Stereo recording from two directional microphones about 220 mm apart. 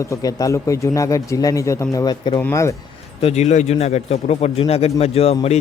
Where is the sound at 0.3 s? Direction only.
15° left (ahead or behind).